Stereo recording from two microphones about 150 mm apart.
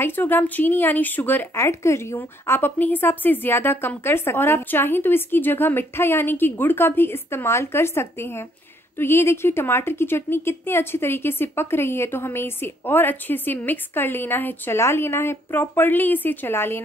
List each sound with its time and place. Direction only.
0.0 s speech: 15° left (ahead or behind)